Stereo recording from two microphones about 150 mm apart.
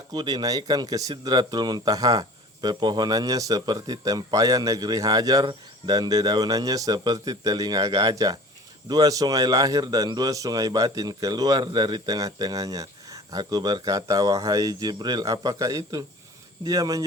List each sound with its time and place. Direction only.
0.1 s speech: 25° right (ahead or behind)